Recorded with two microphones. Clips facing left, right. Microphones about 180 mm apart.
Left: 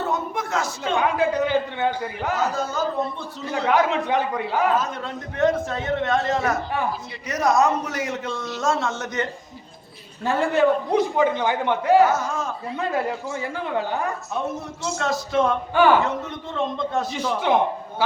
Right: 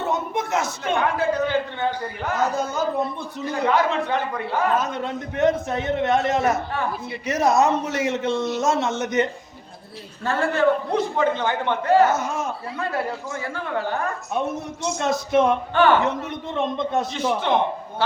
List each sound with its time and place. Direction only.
0.0 s a sound: 20° right (ahead or behind)
0.9 s a man's voice: 15° left (ahead or behind)
2.4 s a man's voice: 20° right (ahead or behind)
3.5 s a man's voice: 15° left (ahead or behind)
4.8 s a man's voice: 20° right (ahead or behind)
10.2 s a man's voice: 15° left (ahead or behind)
12.1 s a man's voice: 20° right (ahead or behind)
12.8 s a man's voice: 15° left (ahead or behind)
14.8 s a man's voice: 20° right (ahead or behind)
15.7 s a man's voice: 10° left (ahead or behind)
16.0 s a man's voice: 20° right (ahead or behind)